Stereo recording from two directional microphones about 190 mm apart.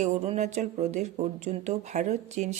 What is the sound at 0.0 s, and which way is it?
Speech, 35° right (ahead or behind).